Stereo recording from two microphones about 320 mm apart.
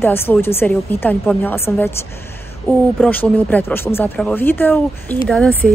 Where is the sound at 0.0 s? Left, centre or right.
Centre.